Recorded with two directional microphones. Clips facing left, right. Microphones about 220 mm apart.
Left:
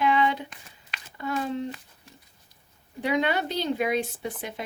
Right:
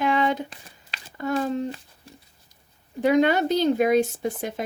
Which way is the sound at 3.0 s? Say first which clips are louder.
Right 7 dB; 45° right (ahead or behind).